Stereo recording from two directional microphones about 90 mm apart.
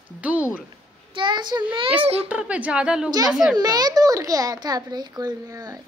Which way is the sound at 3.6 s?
50° right (ahead or behind).